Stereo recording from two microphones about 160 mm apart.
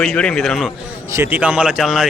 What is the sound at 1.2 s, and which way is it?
Speech, 10° right (ahead or behind).